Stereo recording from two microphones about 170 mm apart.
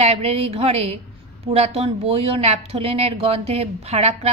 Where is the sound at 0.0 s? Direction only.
35° right (ahead or behind).